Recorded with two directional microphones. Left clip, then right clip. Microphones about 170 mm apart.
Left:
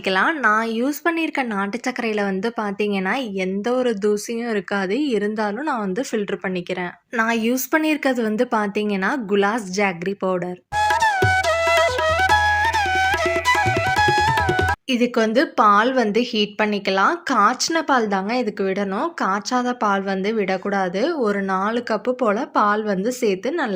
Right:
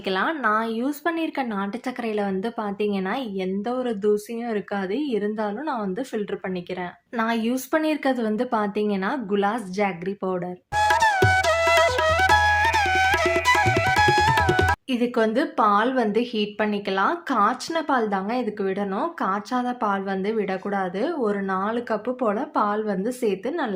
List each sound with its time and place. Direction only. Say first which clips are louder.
0.1 s a woman's voice: left 5 dB; 20° left (ahead or behind)
7.2 s a woman's voice: left 4 dB; 15° left (ahead or behind)
10.8 s music: left 1 dB; centre (ahead or behind)
14.8 s a woman's voice: left 3 dB; 20° left (ahead or behind)